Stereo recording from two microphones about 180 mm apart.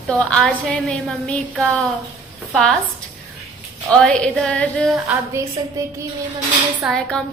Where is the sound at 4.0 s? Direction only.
5° left (ahead or behind).